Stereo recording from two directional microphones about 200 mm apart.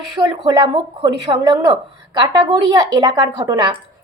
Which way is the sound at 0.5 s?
20° right (ahead or behind).